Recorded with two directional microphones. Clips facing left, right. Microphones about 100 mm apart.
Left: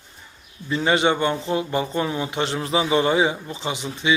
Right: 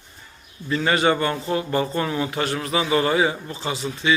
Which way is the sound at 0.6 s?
20° left (ahead or behind).